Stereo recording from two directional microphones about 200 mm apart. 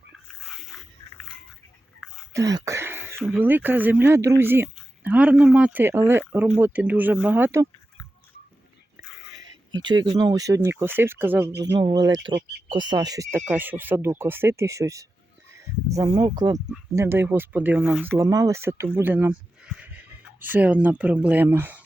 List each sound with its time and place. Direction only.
0.7 s a sound: centre (ahead or behind)
2.3 s throat clearing: 15° right (ahead or behind)
3.2 s speech: 10° right (ahead or behind)
9.3 s speech: 20° right (ahead or behind)
11.8 s speech: 25° right (ahead or behind)
12.3 s speech: 55° right (ahead or behind)
12.6 s speech: 20° right (ahead or behind); by 18.2 s 5° right (ahead or behind)
18.2 s speech: 15° right (ahead or behind)